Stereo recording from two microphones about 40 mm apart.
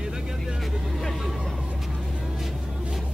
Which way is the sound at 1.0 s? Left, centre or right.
Centre.